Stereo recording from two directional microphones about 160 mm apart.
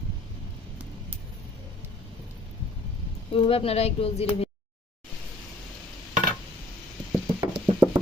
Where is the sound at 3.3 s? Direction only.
35° left (ahead or behind).